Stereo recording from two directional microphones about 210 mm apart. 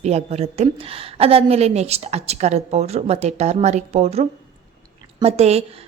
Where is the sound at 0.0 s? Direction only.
30° right (ahead or behind).